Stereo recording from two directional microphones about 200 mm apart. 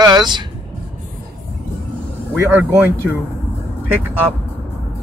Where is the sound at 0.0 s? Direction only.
20° right (ahead or behind).